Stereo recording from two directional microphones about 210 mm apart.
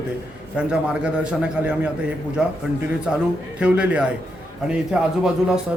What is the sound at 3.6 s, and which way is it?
Speech, 5° right (ahead or behind).